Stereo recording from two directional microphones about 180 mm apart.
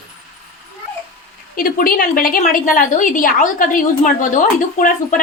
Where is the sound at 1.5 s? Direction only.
55° left (ahead or behind).